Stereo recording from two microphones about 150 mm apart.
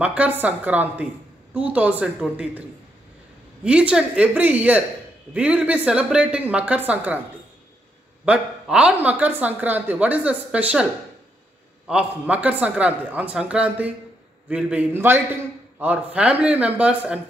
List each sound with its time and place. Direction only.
0.0 s speech: 10° right (ahead or behind)
3.6 s speech: 5° right (ahead or behind)
8.3 s speech: 5° right (ahead or behind)
11.9 s speech: 10° right (ahead or behind)